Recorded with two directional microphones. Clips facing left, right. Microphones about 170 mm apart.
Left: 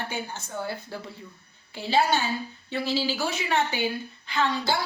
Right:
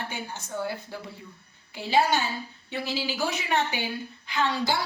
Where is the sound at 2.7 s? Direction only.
15° right (ahead or behind).